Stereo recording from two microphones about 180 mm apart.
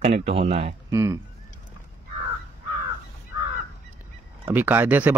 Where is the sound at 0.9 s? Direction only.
15° right (ahead or behind).